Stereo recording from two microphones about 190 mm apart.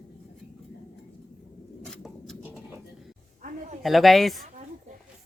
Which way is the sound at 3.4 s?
40° right (ahead or behind).